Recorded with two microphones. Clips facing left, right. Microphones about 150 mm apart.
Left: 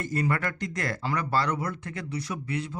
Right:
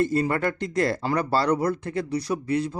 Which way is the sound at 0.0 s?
30° right (ahead or behind).